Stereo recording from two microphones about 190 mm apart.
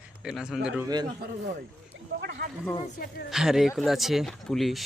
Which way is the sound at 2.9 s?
55° left (ahead or behind).